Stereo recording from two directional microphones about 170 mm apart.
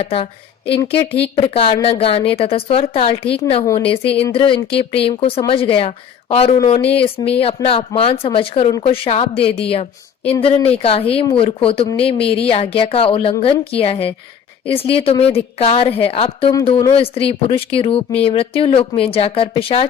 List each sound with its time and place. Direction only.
0.0 s a woman's voice: 35° left (ahead or behind)